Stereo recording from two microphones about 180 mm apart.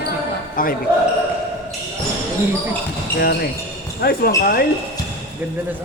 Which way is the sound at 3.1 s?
60° left (ahead or behind).